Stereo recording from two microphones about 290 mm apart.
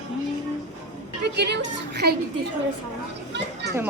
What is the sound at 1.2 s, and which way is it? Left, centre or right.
Speech, right.